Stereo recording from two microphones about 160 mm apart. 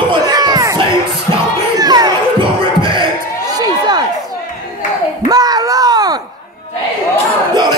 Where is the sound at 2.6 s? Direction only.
30° right (ahead or behind).